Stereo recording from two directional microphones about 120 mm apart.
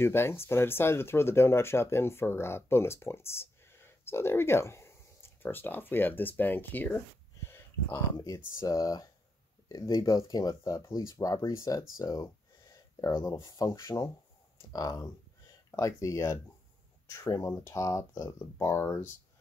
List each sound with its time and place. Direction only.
0.0 s speech: 20° left (ahead or behind)